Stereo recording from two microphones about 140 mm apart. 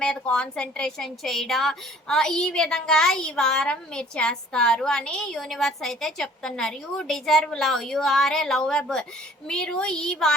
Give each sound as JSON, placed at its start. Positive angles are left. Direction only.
{"t": 0.0, "sound": "a woman's voice", "side_deg": 5}